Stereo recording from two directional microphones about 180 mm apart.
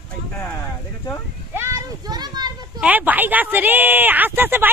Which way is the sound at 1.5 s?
15° right (ahead or behind).